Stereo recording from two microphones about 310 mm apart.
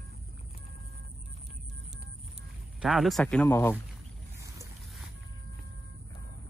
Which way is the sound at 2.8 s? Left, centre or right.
Centre.